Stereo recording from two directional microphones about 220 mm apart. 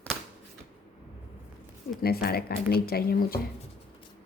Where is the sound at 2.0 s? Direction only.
45° left (ahead or behind).